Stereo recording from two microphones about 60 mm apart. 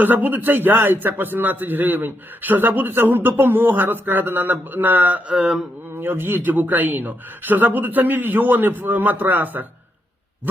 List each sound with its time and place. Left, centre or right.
0.0 s a man's voice: right
5.3 s mantra: centre
6.0 s a man's voice: right